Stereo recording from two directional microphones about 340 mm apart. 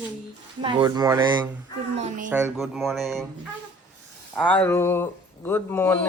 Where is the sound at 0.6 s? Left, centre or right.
Centre.